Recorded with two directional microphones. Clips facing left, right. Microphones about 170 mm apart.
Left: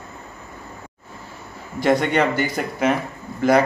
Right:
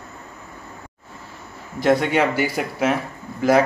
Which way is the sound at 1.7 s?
Centre (ahead or behind).